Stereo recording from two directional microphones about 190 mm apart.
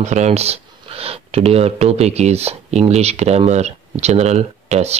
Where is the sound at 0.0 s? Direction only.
35° right (ahead or behind).